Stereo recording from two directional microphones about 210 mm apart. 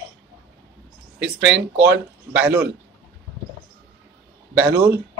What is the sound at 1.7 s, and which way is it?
Speech, 55° right (ahead or behind).